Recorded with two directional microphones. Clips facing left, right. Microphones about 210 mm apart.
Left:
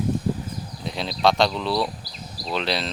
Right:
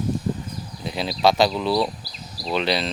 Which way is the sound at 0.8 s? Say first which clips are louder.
Right 2 dB; 5° right (ahead or behind).